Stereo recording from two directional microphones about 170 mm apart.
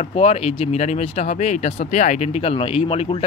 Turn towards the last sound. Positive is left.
turn(degrees=35)  # may be behind; listen again after turning